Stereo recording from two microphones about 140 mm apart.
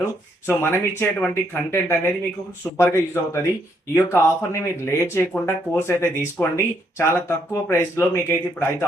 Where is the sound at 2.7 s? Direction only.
20° left (ahead or behind).